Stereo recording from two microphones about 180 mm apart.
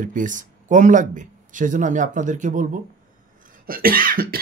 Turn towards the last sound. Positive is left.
turn(degrees=-55)  # may be behind; listen again after turning